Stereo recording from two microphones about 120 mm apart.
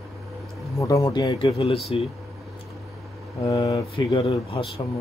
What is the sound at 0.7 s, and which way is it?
Speech, 25° left (ahead or behind).